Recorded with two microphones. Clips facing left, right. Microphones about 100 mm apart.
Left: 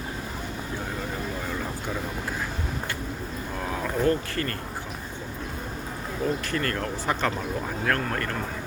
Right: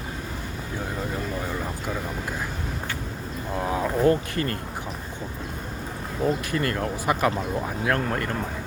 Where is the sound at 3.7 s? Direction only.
20° right (ahead or behind).